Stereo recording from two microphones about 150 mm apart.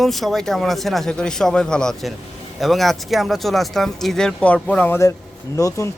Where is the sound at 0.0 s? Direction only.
Centre (ahead or behind).